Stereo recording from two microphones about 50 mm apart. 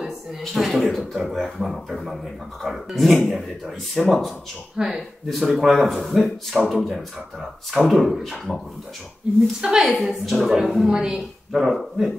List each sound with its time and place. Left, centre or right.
0.4 s speech: centre
4.7 s a woman's voice: centre
5.3 s speech: centre
9.6 s a woman's voice: centre
9.8 s speech: centre
10.9 s a woman's voice: centre
11.1 s speech: centre